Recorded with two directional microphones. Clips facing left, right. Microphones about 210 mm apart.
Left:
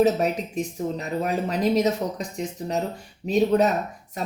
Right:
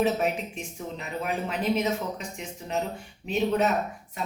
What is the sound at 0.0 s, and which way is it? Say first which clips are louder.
Speech: left 5 dB; 40° left (ahead or behind).